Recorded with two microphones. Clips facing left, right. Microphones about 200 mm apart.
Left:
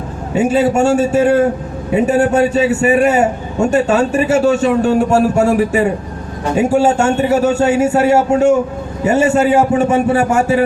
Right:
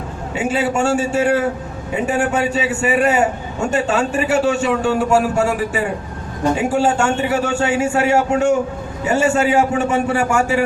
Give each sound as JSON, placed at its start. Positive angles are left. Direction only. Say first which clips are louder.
{"t": 0.3, "sound": "a man's voice", "louder": "left 6 dB", "side_deg": 40}